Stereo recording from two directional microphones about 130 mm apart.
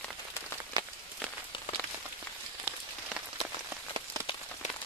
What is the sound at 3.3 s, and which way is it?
Rain on surface, 25° right (ahead or behind).